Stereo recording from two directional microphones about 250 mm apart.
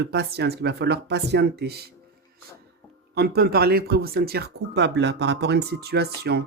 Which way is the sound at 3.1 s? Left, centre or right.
Right.